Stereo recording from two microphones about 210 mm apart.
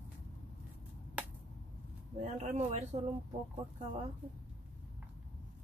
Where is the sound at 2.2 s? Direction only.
35° right (ahead or behind).